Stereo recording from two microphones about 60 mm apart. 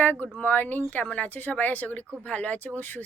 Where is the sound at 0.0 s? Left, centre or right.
Left.